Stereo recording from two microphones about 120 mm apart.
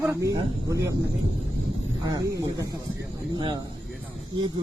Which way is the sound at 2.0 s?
30° right (ahead or behind).